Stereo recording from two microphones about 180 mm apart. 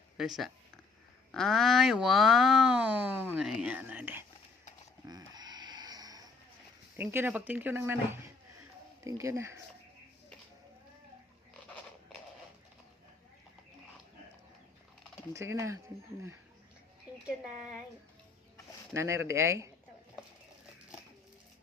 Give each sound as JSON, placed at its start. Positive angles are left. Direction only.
{"t": 0.2, "sound": "speech", "side_deg": 0}
{"t": 5.0, "sound": "a sound", "side_deg": -20}
{"t": 7.0, "sound": "speech", "side_deg": -10}
{"t": 15.3, "sound": "speech", "side_deg": -15}
{"t": 18.9, "sound": "speech", "side_deg": -15}